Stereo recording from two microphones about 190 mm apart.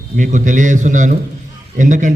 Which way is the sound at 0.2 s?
40° right (ahead or behind).